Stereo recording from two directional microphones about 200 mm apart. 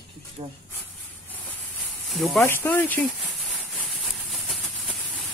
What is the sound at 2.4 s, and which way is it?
Speech, 10° left (ahead or behind).